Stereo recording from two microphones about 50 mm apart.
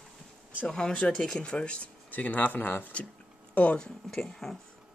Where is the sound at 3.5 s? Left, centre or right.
Left.